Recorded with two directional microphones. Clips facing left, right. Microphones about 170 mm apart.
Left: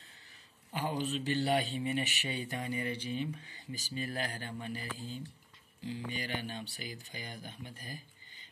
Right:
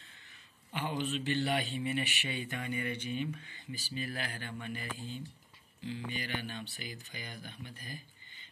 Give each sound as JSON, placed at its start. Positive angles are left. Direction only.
{"t": 0.7, "sound": "speech", "side_deg": 40}
{"t": 5.9, "sound": "speech", "side_deg": 40}